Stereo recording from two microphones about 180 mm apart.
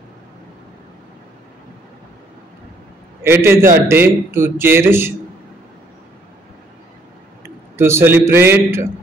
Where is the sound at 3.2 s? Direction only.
15° right (ahead or behind).